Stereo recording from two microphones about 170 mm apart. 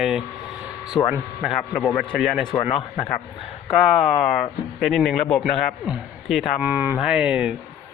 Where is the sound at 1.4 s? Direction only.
Centre (ahead or behind).